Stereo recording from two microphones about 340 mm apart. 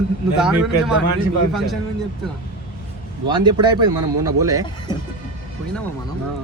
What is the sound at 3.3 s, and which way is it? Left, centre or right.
Speech, centre.